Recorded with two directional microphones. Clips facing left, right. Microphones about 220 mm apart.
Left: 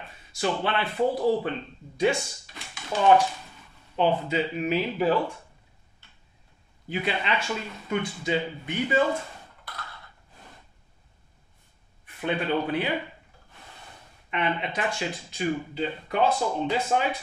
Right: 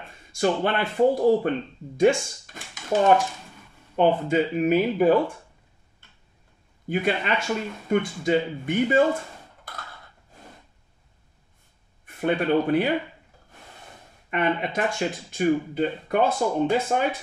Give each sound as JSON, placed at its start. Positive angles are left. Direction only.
{"t": 0.4, "sound": "speech", "side_deg": -50}
{"t": 6.9, "sound": "speech", "side_deg": -50}
{"t": 12.2, "sound": "speech", "side_deg": -50}
{"t": 14.3, "sound": "speech", "side_deg": -45}